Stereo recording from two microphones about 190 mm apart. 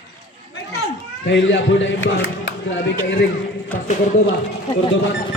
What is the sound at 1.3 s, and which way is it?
A man's voice, 70° left (ahead or behind).